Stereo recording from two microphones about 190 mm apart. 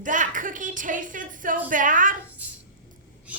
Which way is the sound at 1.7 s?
45° right (ahead or behind).